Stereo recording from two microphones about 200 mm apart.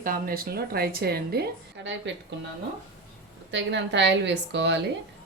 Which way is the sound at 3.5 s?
65° right (ahead or behind).